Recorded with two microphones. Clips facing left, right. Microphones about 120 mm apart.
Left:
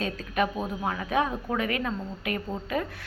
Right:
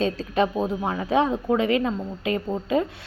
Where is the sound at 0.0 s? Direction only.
25° right (ahead or behind).